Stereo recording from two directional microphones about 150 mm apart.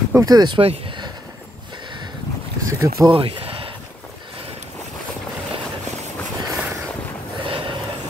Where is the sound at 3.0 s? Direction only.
35° right (ahead or behind).